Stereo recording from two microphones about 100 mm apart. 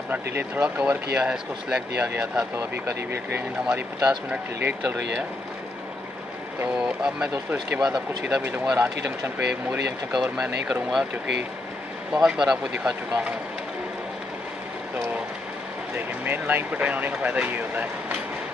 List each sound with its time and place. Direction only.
0.1 s speech: 15° right (ahead or behind)
6.8 s speech: 10° right (ahead or behind)
12.1 s speech: 5° right (ahead or behind)
16.3 s speech: 20° right (ahead or behind)